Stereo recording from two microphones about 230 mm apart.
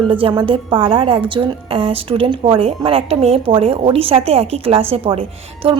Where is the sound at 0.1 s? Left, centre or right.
Right.